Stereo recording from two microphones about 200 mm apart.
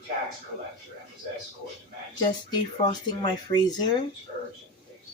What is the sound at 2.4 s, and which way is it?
Speech, 20° left (ahead or behind).